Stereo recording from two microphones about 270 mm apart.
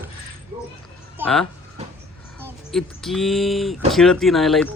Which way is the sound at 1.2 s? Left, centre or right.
Centre.